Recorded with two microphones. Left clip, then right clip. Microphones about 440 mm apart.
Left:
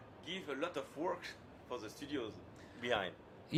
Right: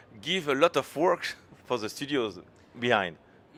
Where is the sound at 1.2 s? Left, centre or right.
Right.